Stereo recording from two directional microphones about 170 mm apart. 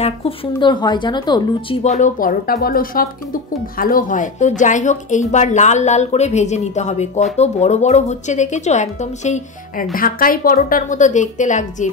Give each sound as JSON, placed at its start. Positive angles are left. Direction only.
{"t": 0.0, "sound": "speech", "side_deg": 30}
{"t": 1.8, "sound": "a woman's voice", "side_deg": 45}
{"t": 9.9, "sound": "a woman's voice", "side_deg": 55}